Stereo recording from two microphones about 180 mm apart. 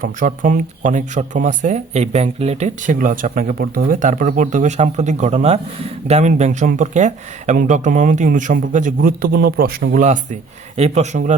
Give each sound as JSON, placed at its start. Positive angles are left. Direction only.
{"t": 0.0, "sound": "speech", "side_deg": -50}